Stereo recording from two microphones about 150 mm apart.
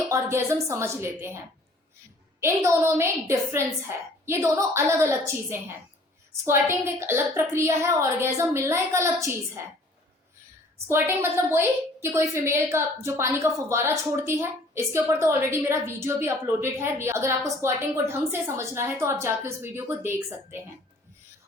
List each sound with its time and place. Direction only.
0.1 s a woman's voice: 20° right (ahead or behind)
2.4 s a woman's voice: 20° right (ahead or behind)
10.8 s a woman's voice: 15° right (ahead or behind)